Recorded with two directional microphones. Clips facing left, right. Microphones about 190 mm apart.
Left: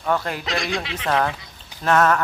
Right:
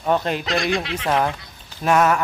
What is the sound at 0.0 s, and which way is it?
Fowl, 20° right (ahead or behind).